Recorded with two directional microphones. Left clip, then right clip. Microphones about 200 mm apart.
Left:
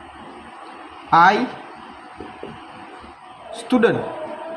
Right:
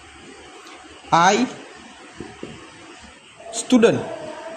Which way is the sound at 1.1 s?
45° right (ahead or behind).